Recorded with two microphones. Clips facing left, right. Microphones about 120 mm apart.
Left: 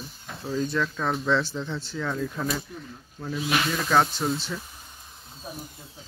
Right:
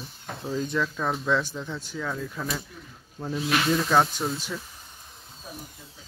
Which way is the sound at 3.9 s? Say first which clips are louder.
Left 1 dB; 20° right (ahead or behind).